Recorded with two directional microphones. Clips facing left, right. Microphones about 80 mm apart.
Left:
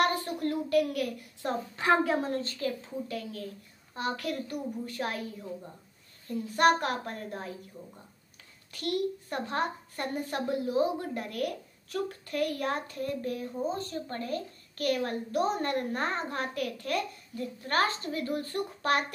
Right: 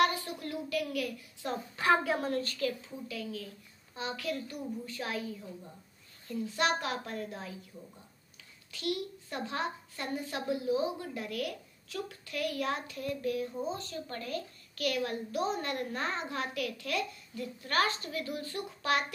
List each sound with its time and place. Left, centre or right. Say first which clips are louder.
0.0 s a child's voice: left 2 dB; left
1.8 s a woman's voice: left 2 dB; centre
3.1 s a child's voice: left 3 dB; left
6.5 s a child's voice: left 7 dB; left
7.7 s a woman's voice: left 3 dB; left
8.7 s a child's voice: left 5 dB; left
14.0 s a woman's voice: left 4 dB; left